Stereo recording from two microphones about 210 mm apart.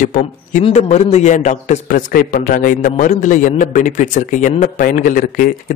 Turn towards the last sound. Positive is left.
turn(degrees=40)  # may be behind; listen again after turning